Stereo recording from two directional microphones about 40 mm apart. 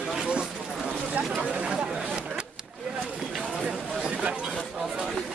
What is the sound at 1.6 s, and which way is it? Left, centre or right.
Speech, right.